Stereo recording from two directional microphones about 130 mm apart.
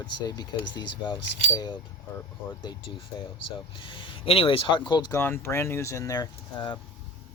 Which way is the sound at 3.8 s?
40° left (ahead or behind).